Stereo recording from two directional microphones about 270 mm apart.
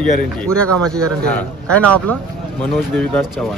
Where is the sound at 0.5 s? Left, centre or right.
Centre.